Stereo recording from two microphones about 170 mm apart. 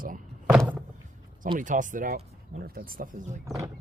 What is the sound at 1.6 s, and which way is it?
Speech, 50° right (ahead or behind).